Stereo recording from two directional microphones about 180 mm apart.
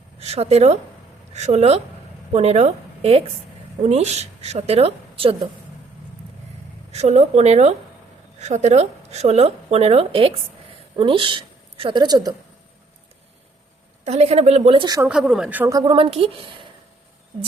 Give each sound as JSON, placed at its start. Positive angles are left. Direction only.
{"t": 0.2, "sound": "a woman's voice", "side_deg": -35}
{"t": 6.9, "sound": "a woman's voice", "side_deg": -40}
{"t": 14.0, "sound": "a woman's voice", "side_deg": -35}
{"t": 15.0, "sound": "speech", "side_deg": -5}
{"t": 15.8, "sound": "a woman's voice", "side_deg": -30}